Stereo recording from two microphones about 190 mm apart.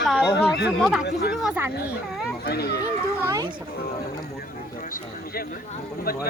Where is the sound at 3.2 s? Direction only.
15° right (ahead or behind).